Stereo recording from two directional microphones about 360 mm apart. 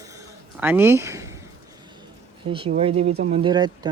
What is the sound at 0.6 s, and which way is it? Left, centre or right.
Speech, centre.